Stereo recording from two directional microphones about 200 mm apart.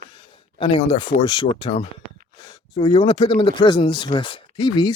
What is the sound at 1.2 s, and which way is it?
Speech, 25° left (ahead or behind).